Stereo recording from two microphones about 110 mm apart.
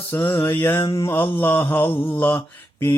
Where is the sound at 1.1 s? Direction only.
20° left (ahead or behind).